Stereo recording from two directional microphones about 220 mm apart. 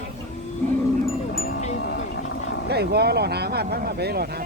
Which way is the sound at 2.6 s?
45° right (ahead or behind).